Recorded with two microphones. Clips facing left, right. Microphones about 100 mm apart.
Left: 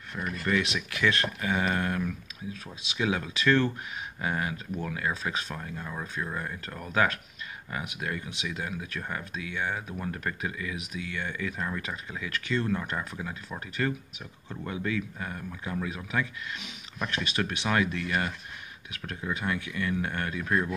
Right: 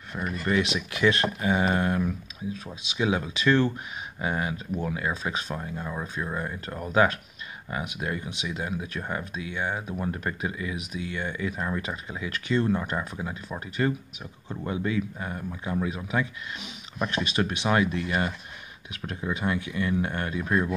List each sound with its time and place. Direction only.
0.1 s speech: 20° right (ahead or behind)